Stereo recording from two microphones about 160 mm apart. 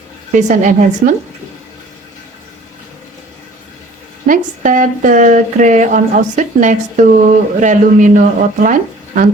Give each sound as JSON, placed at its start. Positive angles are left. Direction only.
{"t": 0.3, "sound": "speech", "side_deg": -50}
{"t": 4.3, "sound": "speech", "side_deg": -55}